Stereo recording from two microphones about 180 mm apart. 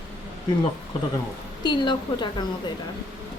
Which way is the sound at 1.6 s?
25° left (ahead or behind).